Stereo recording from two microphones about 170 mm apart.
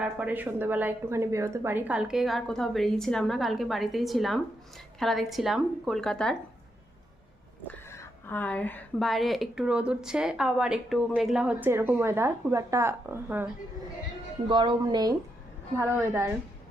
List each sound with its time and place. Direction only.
0.0 s speech: 10° right (ahead or behind)
7.7 s a woman's voice: 15° left (ahead or behind); by 13.5 s 10° right (ahead or behind)
14.4 s speech: 30° right (ahead or behind)
15.8 s a woman's voice: 15° right (ahead or behind)